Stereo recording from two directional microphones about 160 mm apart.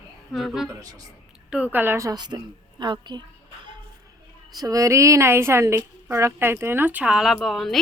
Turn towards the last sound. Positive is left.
turn(degrees=0)  # may be behind; listen again after turning